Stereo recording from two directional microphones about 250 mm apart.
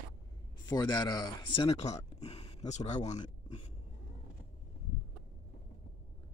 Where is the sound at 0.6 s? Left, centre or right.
Centre.